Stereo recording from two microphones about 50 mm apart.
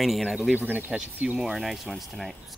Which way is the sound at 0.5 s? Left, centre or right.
Right.